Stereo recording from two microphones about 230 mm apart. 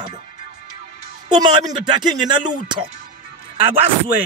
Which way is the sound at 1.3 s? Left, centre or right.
Centre.